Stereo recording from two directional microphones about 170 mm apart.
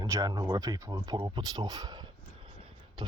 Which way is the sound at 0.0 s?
20° right (ahead or behind).